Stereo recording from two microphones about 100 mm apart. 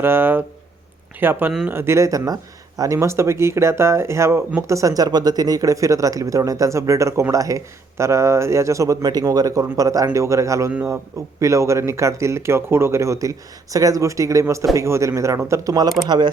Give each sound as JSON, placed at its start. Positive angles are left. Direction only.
{"t": 0.0, "sound": "speech", "side_deg": -20}